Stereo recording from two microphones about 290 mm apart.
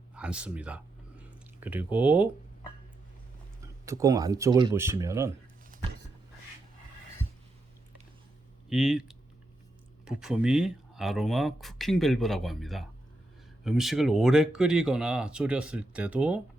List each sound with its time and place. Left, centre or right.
0.1 s speech: centre
3.6 s speech: centre
8.7 s speech: centre
10.1 s speech: centre